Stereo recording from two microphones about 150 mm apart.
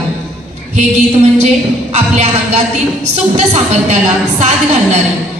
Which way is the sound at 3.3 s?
50° right (ahead or behind).